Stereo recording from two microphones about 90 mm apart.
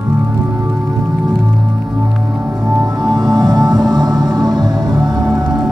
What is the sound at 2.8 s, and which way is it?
Music, 50° right (ahead or behind).